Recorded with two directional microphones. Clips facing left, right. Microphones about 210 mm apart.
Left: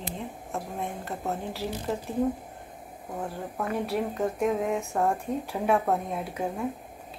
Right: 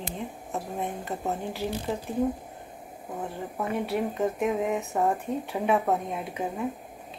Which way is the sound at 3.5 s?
Centre (ahead or behind).